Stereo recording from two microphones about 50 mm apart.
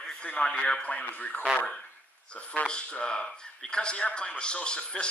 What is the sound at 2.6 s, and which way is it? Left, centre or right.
A man's voice, centre.